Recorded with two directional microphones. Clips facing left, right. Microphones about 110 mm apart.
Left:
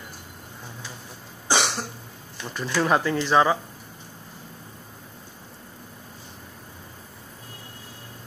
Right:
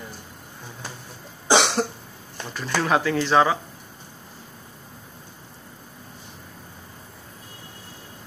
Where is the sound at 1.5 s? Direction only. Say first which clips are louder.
Right 5 dB; 90° right.